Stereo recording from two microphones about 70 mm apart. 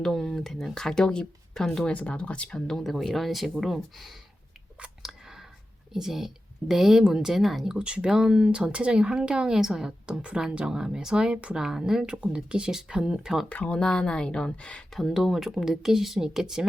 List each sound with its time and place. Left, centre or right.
0.0 s speech: centre
1.9 s speech: centre
5.0 s a sound: centre
5.9 s a woman's voice: centre
13.5 s speech: centre
13.7 s speech: centre
14.9 s a woman's voice: centre